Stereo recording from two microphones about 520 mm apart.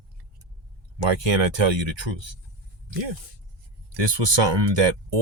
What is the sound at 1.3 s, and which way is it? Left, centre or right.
Speech, right.